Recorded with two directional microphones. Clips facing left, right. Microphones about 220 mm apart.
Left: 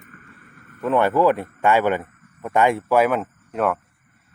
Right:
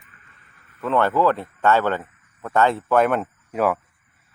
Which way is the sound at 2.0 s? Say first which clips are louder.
Left 5 dB; 50° left (ahead or behind).